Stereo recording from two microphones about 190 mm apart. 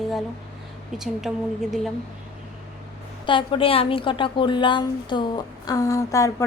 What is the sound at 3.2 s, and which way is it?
A woman's voice, 25° left (ahead or behind).